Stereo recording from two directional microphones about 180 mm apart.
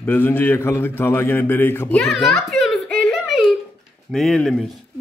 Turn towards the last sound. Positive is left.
turn(degrees=0)  # may be behind; listen again after turning